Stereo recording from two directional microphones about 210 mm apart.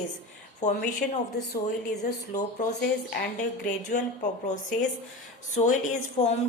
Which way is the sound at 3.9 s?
35° left (ahead or behind).